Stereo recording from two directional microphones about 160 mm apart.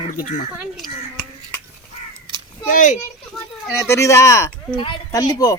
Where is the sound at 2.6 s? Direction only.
55° left (ahead or behind).